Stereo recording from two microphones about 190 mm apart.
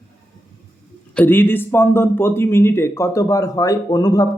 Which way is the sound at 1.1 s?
10° left (ahead or behind).